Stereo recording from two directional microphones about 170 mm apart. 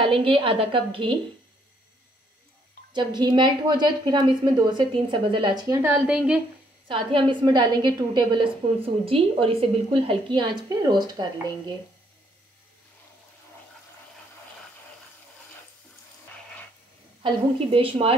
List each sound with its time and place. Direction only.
0.0 s a woman's voice: 30° right (ahead or behind)
2.9 s a woman's voice: 25° right (ahead or behind); by 6.4 s 5° right (ahead or behind)
6.9 s a woman's voice: 30° right (ahead or behind)
17.2 s a woman's voice: 30° right (ahead or behind)